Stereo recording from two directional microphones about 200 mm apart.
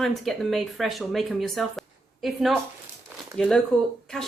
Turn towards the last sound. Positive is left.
turn(degrees=5)  # may be behind; listen again after turning